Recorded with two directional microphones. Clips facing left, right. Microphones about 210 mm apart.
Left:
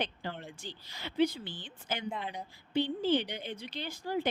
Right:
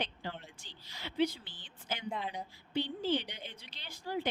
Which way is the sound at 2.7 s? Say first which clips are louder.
Left 4 dB; 50° left (ahead or behind).